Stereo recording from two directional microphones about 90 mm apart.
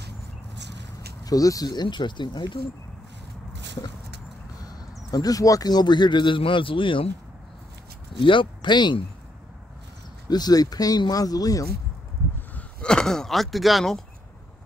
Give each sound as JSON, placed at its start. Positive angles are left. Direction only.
{"t": 1.2, "sound": "speech", "side_deg": 40}
{"t": 4.6, "sound": "speech", "side_deg": 45}
{"t": 8.1, "sound": "speech", "side_deg": 70}
{"t": 10.3, "sound": "speech", "side_deg": 45}
{"t": 12.5, "sound": "speech", "side_deg": 10}